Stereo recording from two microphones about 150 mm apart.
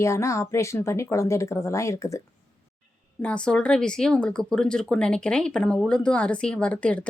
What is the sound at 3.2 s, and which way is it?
Speech, 5° left (ahead or behind).